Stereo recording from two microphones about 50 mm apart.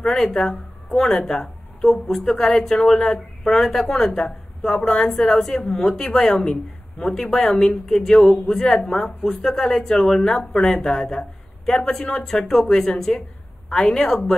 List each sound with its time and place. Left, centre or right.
0.0 s a woman's voice: centre